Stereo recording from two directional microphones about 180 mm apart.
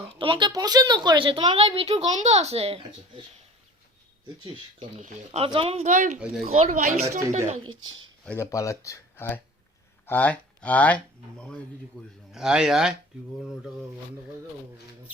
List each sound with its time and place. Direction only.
0.1 s a woman's voice: 30° right (ahead or behind)
4.8 s speech: 45° right (ahead or behind)
6.1 s a man's voice: 5° right (ahead or behind)
6.4 s speech: 35° right (ahead or behind)
8.2 s a man's voice: 10° left (ahead or behind)